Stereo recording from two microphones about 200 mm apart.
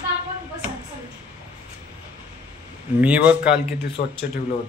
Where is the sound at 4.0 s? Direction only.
40° left (ahead or behind).